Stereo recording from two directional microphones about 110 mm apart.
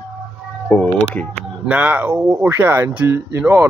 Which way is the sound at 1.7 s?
10° right (ahead or behind).